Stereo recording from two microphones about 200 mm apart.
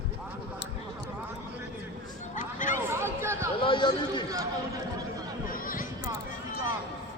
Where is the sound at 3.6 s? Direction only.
25° left (ahead or behind).